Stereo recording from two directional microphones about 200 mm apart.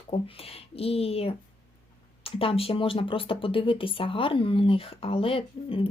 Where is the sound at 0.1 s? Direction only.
30° left (ahead or behind).